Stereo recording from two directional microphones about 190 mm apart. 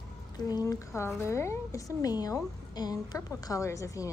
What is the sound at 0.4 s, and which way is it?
A woman's voice, 20° left (ahead or behind).